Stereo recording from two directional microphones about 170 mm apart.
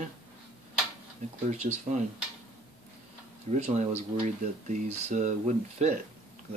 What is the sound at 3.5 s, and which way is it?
Speech, 45° right (ahead or behind).